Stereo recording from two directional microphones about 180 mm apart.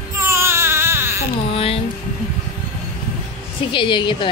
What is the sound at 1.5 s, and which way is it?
Music, 30° left (ahead or behind).